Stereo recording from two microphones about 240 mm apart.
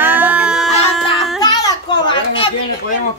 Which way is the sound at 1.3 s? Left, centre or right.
Centre.